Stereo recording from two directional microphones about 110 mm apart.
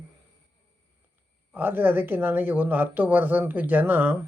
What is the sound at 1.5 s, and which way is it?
Speech, 15° right (ahead or behind).